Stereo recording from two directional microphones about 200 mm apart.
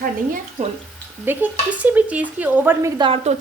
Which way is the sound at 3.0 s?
25° right (ahead or behind).